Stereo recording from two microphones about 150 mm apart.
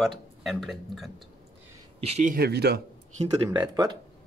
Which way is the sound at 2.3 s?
90° right.